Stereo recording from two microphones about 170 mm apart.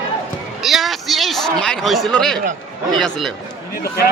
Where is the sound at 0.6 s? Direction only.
Centre (ahead or behind).